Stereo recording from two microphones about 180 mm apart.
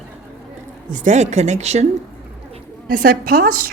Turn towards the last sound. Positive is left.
turn(degrees=-55)  # may be behind; listen again after turning